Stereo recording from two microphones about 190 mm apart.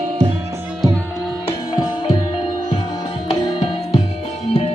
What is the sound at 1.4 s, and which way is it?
Music, 25° left (ahead or behind).